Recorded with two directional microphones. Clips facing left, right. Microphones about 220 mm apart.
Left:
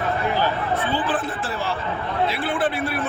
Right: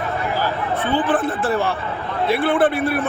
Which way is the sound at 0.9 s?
55° right (ahead or behind).